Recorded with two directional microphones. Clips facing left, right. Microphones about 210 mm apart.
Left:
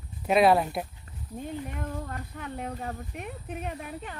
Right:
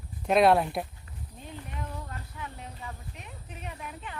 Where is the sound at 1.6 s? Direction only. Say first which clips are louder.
Left 5 dB; 50° left (ahead or behind).